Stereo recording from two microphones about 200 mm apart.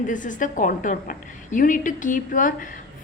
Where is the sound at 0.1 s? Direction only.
40° left (ahead or behind).